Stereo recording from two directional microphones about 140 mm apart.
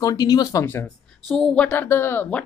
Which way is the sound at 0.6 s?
15° left (ahead or behind).